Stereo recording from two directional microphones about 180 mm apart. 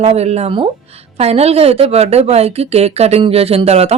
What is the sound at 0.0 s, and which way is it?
Speech, 35° right (ahead or behind).